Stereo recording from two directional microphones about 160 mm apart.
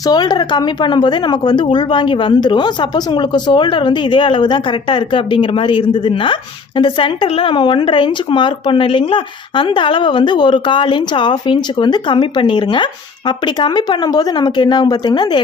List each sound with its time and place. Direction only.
0.0 s a woman's voice: 25° left (ahead or behind)